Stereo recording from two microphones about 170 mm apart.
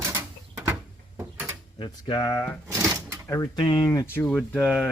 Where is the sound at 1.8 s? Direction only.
25° left (ahead or behind).